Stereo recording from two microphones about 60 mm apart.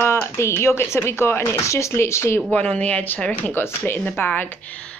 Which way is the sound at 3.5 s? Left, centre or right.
Left.